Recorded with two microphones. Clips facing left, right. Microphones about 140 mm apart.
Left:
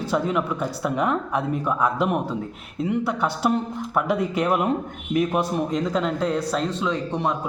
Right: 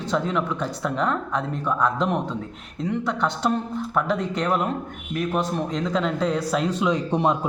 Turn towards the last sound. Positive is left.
turn(degrees=-20)  # may be behind; listen again after turning